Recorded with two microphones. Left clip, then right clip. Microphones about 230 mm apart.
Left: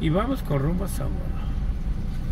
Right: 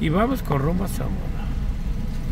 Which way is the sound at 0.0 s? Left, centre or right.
Centre.